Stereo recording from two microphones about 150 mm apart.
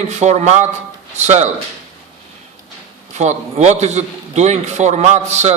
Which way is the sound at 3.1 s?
50° right (ahead or behind).